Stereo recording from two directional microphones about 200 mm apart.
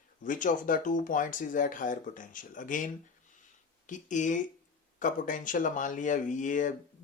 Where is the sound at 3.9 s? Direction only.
40° left (ahead or behind).